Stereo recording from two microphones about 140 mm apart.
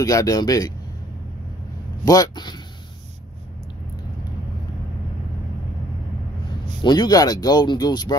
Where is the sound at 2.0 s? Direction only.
30° left (ahead or behind).